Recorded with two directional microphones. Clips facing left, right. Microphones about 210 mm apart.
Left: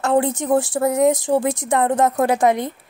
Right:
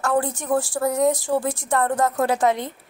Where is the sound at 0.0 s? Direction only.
20° left (ahead or behind).